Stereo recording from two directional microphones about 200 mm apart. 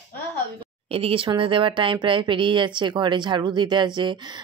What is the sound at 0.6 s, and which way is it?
Speech, 30° right (ahead or behind).